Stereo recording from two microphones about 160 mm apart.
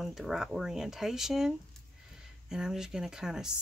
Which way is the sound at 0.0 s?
Centre (ahead or behind).